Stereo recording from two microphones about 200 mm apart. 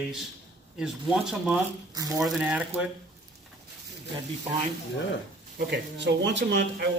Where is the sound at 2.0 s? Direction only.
15° right (ahead or behind).